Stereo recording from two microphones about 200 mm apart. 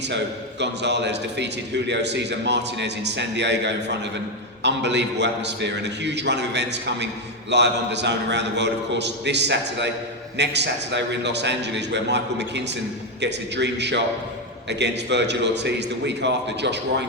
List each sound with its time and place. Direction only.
0.6 s a man's voice: 60° right (ahead or behind)